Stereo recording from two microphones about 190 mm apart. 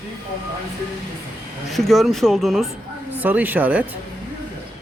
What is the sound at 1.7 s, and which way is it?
A man's voice, centre (ahead or behind).